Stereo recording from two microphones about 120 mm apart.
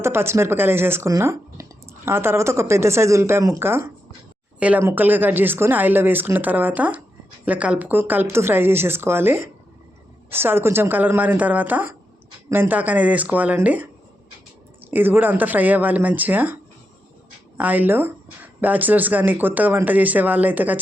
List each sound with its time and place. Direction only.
0.0 s speech: 20° right (ahead or behind)
14.8 s speech: 15° right (ahead or behind)
17.6 s speech: 15° right (ahead or behind)